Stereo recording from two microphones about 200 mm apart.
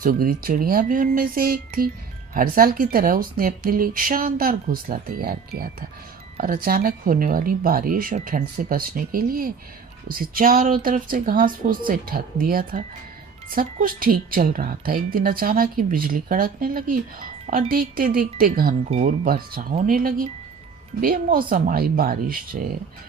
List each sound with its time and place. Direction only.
0.0 s a woman's voice: 45° right (ahead or behind)
18.9 s speech: 30° right (ahead or behind)
19.2 s a woman's voice: 45° right (ahead or behind)